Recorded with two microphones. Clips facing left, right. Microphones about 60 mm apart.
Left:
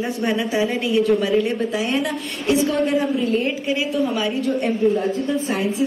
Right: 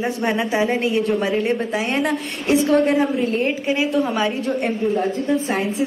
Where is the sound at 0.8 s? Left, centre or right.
Right.